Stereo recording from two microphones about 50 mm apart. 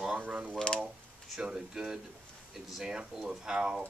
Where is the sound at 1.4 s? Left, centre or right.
Centre.